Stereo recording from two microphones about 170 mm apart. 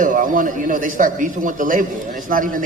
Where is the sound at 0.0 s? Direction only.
50° right (ahead or behind).